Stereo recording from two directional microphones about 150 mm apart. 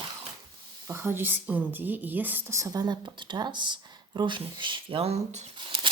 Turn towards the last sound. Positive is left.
turn(degrees=-45)  # may be behind; listen again after turning